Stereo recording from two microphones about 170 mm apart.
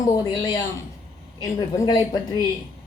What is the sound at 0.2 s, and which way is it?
A woman's voice, 25° left (ahead or behind).